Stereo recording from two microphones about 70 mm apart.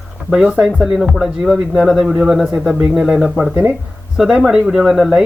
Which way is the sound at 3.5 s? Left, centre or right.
Right.